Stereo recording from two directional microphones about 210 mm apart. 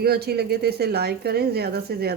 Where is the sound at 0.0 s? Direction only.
50° right (ahead or behind).